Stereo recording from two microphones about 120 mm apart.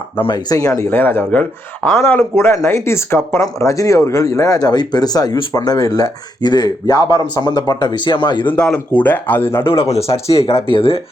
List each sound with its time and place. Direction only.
0.2 s speech: 35° left (ahead or behind)
0.9 s speech: 15° left (ahead or behind); by 8.4 s 40° left (ahead or behind)
8.4 s speech: 10° left (ahead or behind)
9.9 s speech: 55° left (ahead or behind)